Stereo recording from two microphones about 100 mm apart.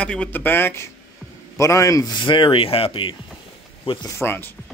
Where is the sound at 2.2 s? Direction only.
55° left (ahead or behind).